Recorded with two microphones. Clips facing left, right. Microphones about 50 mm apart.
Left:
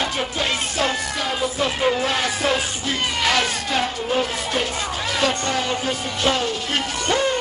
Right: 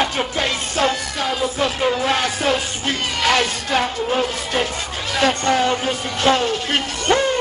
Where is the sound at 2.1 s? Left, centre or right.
Right.